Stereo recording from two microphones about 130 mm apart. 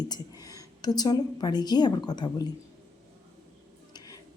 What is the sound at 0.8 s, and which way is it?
A woman's voice, 30° left (ahead or behind).